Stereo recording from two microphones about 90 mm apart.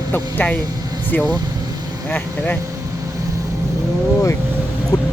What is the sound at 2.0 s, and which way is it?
Speech, 20° left (ahead or behind).